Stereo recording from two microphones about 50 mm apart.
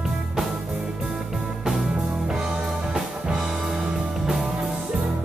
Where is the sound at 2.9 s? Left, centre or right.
Centre.